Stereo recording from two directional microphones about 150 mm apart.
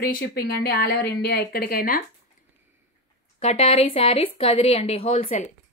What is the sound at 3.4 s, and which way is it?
Speech, 45° left (ahead or behind).